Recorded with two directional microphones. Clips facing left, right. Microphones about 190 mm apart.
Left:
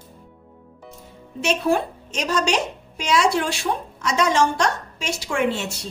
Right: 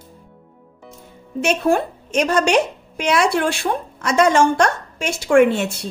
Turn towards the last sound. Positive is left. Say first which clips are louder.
# right 9 dB
turn(degrees=-55)  # may be behind; listen again after turning